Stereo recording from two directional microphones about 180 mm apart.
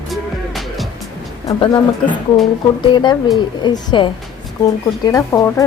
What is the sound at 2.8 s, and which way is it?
Speech, 25° left (ahead or behind).